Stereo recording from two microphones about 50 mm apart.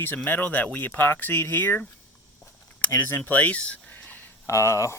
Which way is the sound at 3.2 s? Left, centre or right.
Left.